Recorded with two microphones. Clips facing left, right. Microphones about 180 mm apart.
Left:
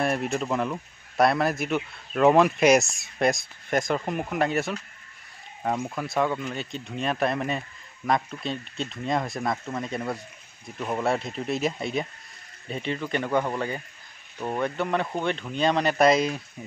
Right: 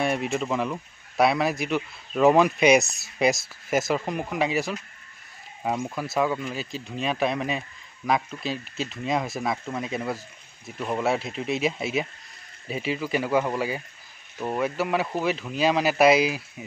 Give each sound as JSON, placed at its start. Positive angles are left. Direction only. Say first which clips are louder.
{"t": 0.0, "sound": "speech", "louder": "even", "side_deg": 0}